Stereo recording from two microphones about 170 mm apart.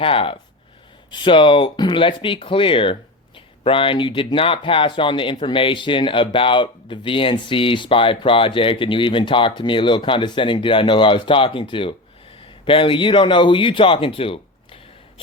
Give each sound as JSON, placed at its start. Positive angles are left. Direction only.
{"t": 0.0, "sound": "speech", "side_deg": 30}